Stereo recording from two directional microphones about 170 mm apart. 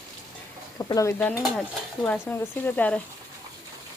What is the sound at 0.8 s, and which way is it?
Speech, 20° left (ahead or behind).